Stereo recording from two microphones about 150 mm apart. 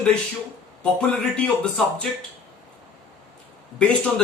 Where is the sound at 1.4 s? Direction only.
5° left (ahead or behind).